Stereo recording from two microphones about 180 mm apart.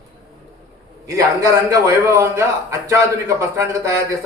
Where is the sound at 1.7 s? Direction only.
15° right (ahead or behind).